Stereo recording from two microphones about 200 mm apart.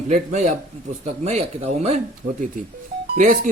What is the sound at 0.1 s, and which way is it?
A man's voice, 35° right (ahead or behind).